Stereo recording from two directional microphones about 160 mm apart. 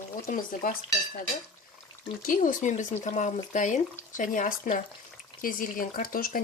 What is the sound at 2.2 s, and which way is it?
Speech, 55° left (ahead or behind).